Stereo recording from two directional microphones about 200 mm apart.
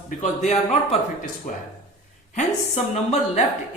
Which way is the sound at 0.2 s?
35° left (ahead or behind).